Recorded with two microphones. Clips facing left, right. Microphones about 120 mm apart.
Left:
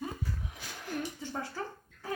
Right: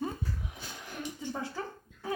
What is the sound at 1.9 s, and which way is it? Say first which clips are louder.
Cough: right 5 dB; 20° right (ahead or behind).